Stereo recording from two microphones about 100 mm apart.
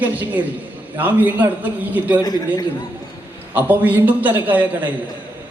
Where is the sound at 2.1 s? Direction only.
40° left (ahead or behind).